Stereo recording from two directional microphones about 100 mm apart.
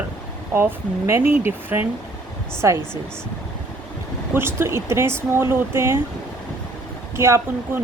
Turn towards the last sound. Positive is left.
turn(degrees=-25)  # may be behind; listen again after turning